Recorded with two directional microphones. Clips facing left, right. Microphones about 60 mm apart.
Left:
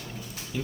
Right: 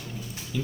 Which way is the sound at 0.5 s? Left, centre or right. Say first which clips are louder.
Right 1 dB; centre.